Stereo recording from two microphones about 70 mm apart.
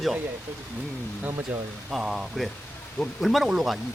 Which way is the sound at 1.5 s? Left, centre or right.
Right.